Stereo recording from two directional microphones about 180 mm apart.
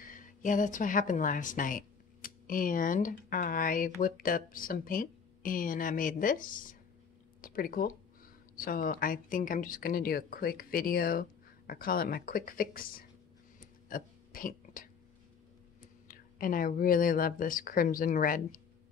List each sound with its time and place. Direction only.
0.0 s speech: 50° left (ahead or behind)
13.6 s a sound: 50° left (ahead or behind)
16.1 s speech: 50° left (ahead or behind)